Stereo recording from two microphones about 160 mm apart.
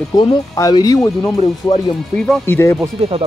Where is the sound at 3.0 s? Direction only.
35° right (ahead or behind).